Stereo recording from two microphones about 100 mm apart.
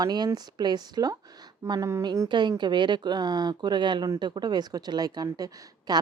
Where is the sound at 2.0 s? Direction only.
40° right (ahead or behind).